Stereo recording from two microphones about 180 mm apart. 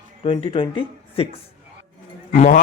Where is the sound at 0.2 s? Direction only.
30° left (ahead or behind).